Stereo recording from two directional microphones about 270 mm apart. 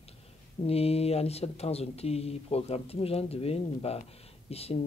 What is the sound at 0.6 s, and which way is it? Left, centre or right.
Speech, left.